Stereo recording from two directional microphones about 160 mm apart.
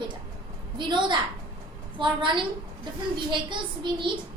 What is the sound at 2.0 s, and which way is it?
A child's voice, 30° right (ahead or behind).